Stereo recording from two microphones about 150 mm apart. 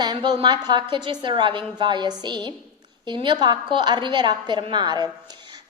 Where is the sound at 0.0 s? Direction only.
35° right (ahead or behind).